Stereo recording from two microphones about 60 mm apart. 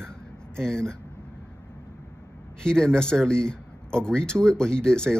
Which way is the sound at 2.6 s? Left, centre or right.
Centre.